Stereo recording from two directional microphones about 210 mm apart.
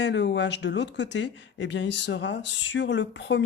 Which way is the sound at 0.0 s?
55° left (ahead or behind).